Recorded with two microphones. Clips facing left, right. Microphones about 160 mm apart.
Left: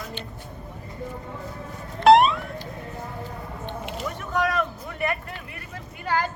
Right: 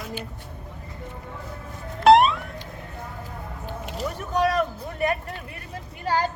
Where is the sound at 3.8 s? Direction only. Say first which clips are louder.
Right 4 dB; 40° right (ahead or behind).